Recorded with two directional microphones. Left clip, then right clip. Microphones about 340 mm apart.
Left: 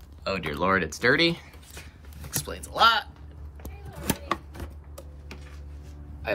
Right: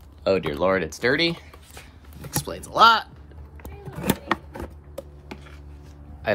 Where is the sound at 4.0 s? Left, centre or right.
Right.